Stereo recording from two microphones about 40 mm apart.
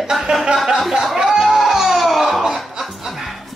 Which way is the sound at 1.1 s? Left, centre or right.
Centre.